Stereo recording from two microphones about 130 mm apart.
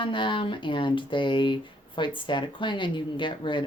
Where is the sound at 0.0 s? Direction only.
40° left (ahead or behind).